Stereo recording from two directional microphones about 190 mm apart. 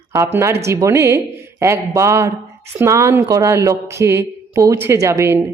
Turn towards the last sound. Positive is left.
turn(degrees=-15)  # may be behind; listen again after turning